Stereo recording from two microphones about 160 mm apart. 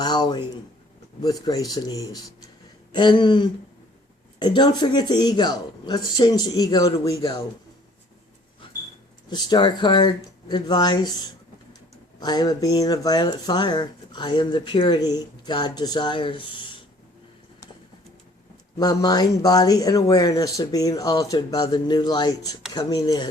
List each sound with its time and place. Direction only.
0.0 s speech: 25° left (ahead or behind)
7.0 s speech: 20° left (ahead or behind)
9.3 s speech: 25° left (ahead or behind)
12.2 s speech: 25° left (ahead or behind)
18.8 s speech: 25° left (ahead or behind)